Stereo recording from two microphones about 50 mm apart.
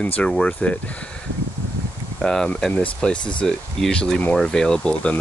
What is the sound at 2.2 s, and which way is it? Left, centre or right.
Speech, centre.